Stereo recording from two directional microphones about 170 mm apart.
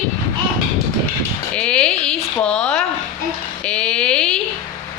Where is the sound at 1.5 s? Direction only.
5° left (ahead or behind).